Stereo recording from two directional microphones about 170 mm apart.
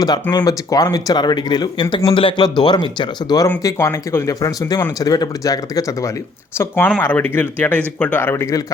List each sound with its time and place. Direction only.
0.0 s speech: 25° left (ahead or behind)